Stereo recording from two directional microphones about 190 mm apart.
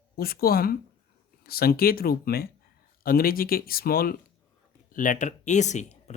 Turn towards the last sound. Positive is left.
turn(degrees=35)  # may be behind; listen again after turning